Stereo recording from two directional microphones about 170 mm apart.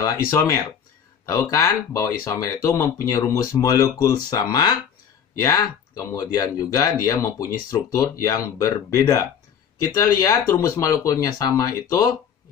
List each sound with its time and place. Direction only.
0.0 s speech: 20° left (ahead or behind)
10.5 s speech: 20° left (ahead or behind)